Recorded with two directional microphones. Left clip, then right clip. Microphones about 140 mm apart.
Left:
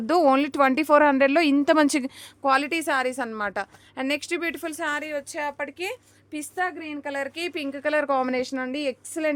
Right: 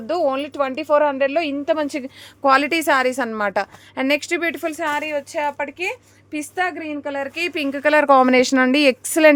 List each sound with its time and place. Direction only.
0.1 s speech: 75° left (ahead or behind); by 2.0 s 50° left (ahead or behind)
2.4 s a woman's voice: 5° right (ahead or behind)
7.0 s speech: 10° left (ahead or behind)
7.3 s speech: centre (ahead or behind); by 9.3 s 40° right (ahead or behind)